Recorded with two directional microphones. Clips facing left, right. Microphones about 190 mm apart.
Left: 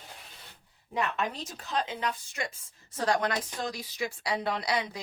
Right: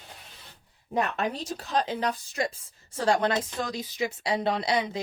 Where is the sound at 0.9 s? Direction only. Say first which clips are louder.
Right 3 dB; 35° right (ahead or behind).